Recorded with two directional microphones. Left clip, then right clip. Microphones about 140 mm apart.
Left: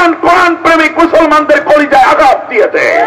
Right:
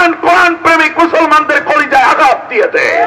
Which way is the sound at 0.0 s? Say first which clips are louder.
Left 1 dB; 40° left (ahead or behind).